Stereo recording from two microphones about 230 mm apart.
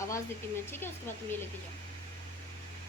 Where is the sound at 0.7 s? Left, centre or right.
Centre.